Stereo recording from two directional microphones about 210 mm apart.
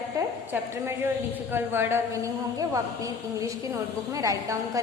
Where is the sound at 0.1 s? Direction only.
15° right (ahead or behind).